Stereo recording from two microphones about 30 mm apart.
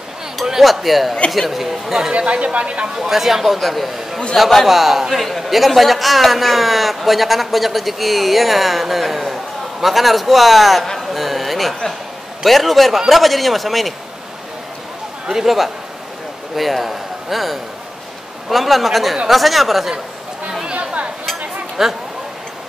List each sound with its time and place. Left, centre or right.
0.6 s a man's voice: centre
2.1 s speech: right
3.0 s speech: centre
4.4 s a man's voice: centre
4.6 s a man's voice: centre
15.4 s a man's voice: centre
21.8 s speech: centre